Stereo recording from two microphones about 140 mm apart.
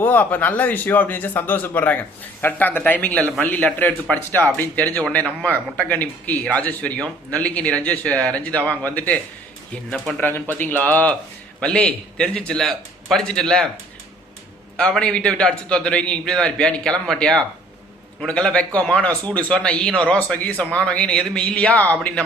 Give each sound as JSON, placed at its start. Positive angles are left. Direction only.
{"t": 0.0, "sound": "speech", "side_deg": 15}
{"t": 14.8, "sound": "speech", "side_deg": 5}